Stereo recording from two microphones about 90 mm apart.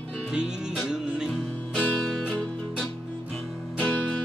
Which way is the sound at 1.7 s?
10° left (ahead or behind).